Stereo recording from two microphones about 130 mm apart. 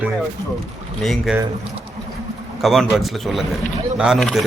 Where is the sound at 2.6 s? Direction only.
Centre (ahead or behind).